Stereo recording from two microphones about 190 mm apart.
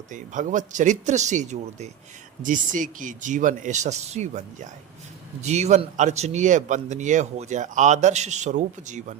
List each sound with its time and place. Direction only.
0.1 s a man's voice: 40° right (ahead or behind)